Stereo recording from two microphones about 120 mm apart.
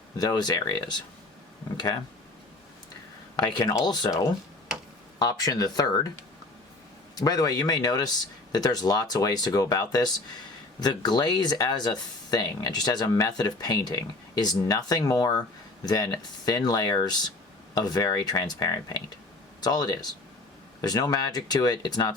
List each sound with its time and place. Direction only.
0.2 s speech: 35° left (ahead or behind)
3.3 s speech: 35° left (ahead or behind)
5.2 s speech: 30° left (ahead or behind)
7.2 s speech: 30° left (ahead or behind)
16.5 s speech: 30° left (ahead or behind)